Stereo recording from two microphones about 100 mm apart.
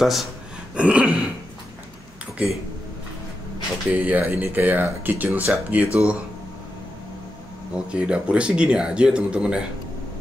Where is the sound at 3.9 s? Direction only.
15° right (ahead or behind).